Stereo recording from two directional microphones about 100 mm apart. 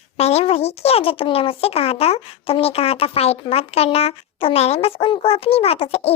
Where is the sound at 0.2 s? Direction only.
90° left.